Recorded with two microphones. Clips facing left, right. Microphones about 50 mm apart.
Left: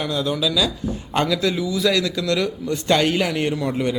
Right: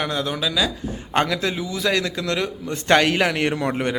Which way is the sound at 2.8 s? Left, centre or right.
Right.